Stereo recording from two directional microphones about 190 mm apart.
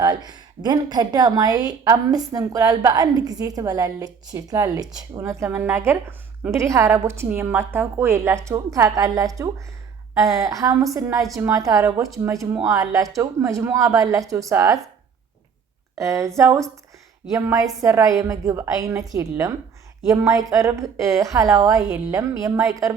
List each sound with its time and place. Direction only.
0.0 s a woman's voice: 20° right (ahead or behind)
16.0 s a woman's voice: 15° right (ahead or behind)